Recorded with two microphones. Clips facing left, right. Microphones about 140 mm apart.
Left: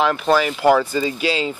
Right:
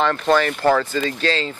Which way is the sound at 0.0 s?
5° left (ahead or behind).